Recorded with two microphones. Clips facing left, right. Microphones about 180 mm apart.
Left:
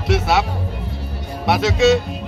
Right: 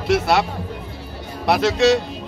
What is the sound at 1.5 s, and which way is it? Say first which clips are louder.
Speech: left 1 dB; centre (ahead or behind).